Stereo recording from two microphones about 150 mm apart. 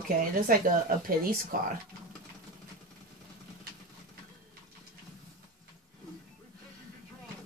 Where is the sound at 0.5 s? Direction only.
70° right (ahead or behind).